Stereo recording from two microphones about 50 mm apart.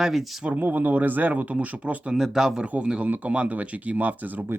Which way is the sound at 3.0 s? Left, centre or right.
Right.